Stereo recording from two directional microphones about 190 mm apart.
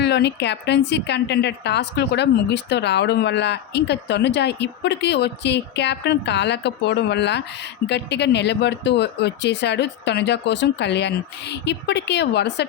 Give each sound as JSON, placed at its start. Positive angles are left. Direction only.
{"t": 0.0, "sound": "a woman's voice", "side_deg": 60}